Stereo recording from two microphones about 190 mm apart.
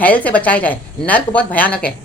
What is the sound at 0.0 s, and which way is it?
A woman's voice, 10° left (ahead or behind).